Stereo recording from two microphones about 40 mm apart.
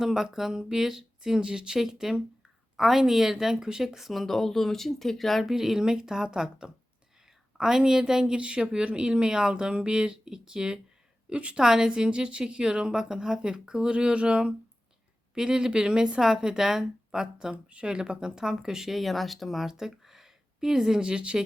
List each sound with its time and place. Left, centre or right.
0.0 s speech: centre
5.5 s speech: centre
8.4 s a woman's voice: right; by 19.6 s centre
19.6 s speech: centre